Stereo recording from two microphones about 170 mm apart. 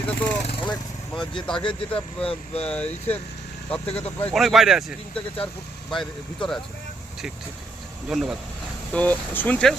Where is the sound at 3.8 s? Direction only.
35° left (ahead or behind).